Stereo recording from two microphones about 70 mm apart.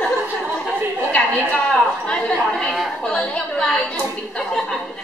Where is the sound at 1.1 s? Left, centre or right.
Centre.